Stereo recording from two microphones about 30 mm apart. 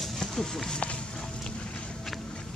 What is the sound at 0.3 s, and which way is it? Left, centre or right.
Speech, centre.